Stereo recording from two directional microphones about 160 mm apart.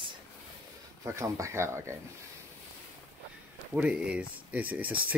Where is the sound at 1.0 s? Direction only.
20° right (ahead or behind).